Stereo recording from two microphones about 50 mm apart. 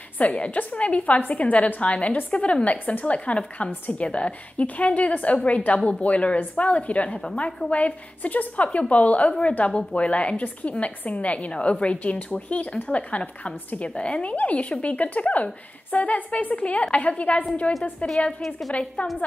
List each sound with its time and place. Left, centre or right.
0.2 s a woman's voice: left
18.7 s a woman's voice: left